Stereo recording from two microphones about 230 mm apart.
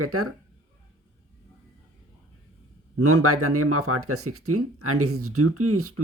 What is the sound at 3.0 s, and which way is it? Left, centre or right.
Speech, right.